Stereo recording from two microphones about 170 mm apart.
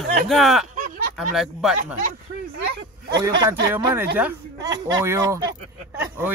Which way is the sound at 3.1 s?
20° right (ahead or behind).